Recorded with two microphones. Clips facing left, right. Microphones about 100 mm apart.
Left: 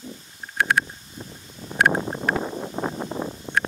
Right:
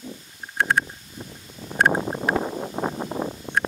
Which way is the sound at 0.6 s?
90° left.